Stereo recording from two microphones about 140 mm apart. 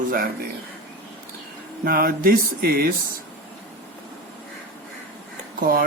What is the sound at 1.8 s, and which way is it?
Speech, 90° right.